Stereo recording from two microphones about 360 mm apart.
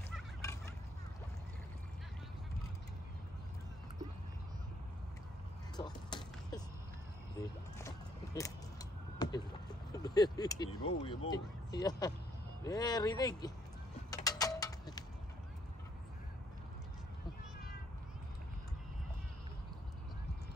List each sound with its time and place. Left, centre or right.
5.8 s music: centre
7.8 s vehicle: centre
10.0 s speech: centre
10.7 s speech: left
11.1 s speech: centre
14.1 s a sound: centre